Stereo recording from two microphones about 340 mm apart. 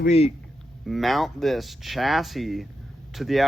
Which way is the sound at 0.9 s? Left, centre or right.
Centre.